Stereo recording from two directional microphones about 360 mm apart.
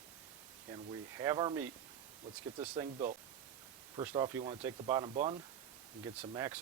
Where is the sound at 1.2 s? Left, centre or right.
Centre.